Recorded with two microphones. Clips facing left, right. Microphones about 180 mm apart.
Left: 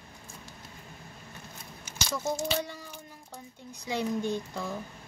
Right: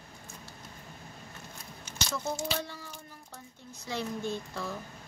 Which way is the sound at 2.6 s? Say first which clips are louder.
Left 4 dB; 15° left (ahead or behind).